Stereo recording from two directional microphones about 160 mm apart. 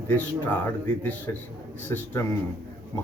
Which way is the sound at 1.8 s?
15° left (ahead or behind).